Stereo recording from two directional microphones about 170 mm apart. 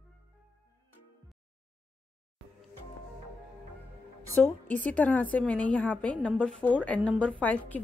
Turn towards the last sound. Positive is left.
turn(degrees=10)  # may be behind; listen again after turning